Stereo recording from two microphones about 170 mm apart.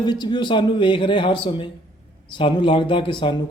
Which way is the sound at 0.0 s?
25° left (ahead or behind).